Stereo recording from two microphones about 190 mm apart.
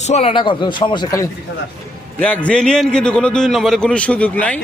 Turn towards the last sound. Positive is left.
turn(degrees=5)  # may be behind; listen again after turning